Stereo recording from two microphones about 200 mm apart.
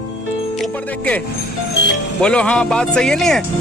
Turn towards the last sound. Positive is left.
turn(degrees=5)  # may be behind; listen again after turning